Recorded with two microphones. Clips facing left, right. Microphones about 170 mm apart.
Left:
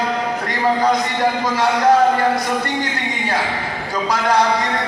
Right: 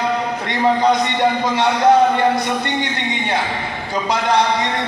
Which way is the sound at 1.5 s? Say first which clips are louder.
Even; 25° right (ahead or behind).